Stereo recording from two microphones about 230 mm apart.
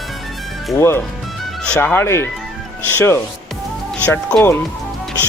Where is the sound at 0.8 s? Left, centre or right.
Centre.